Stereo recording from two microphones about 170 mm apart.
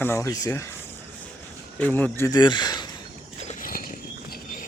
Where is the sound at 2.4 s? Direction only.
25° left (ahead or behind).